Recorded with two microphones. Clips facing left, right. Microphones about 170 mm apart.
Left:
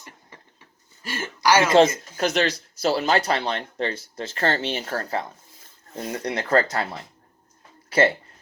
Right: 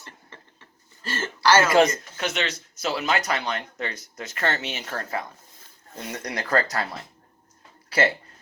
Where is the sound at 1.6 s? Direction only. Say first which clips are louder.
Left 5 dB; 25° left (ahead or behind).